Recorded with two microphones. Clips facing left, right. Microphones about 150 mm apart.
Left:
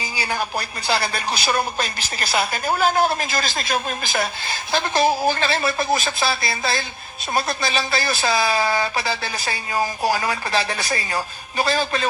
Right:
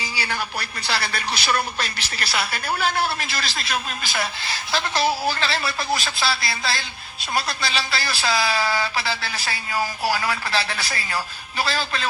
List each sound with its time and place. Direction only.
0.0 s speech: 45° left (ahead or behind)
9.5 s speech: 20° left (ahead or behind)
10.5 s speech: 45° left (ahead or behind)